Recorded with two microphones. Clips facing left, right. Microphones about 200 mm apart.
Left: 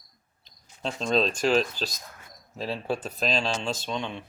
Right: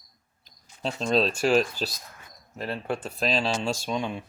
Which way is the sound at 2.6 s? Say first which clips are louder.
Left 1 dB; 5° left (ahead or behind).